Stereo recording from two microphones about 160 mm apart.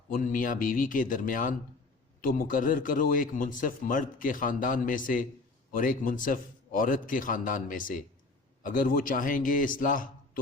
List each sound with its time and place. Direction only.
0.1 s a man's voice: 55° left (ahead or behind)